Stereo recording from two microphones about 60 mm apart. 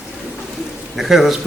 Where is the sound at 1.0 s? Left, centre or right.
Centre.